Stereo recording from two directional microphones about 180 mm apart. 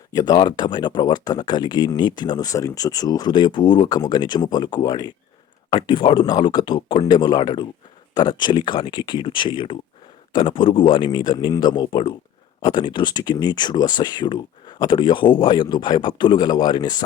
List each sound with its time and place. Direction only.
0.1 s speech: 20° left (ahead or behind)